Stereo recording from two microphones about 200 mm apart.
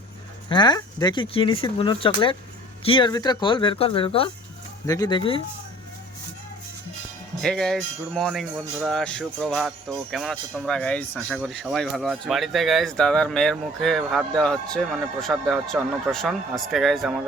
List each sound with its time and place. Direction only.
0.4 s speech: 20° left (ahead or behind)
7.4 s speech: 5° left (ahead or behind)